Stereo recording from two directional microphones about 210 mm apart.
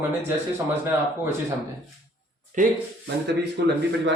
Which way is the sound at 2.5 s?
35° right (ahead or behind).